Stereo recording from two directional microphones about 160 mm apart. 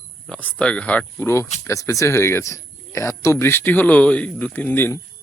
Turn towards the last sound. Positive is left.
turn(degrees=15)  # may be behind; listen again after turning